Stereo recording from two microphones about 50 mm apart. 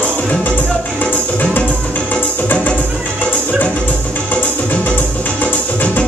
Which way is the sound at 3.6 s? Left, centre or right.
Left.